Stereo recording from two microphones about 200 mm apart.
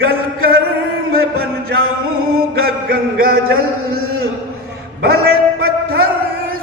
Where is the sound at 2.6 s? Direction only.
50° right (ahead or behind).